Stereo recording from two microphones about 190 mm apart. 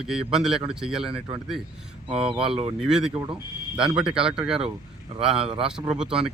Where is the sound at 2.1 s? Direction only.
30° right (ahead or behind).